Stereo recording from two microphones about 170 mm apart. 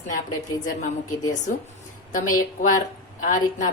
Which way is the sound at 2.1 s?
50° left (ahead or behind).